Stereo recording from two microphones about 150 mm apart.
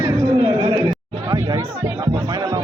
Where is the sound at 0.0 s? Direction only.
25° right (ahead or behind).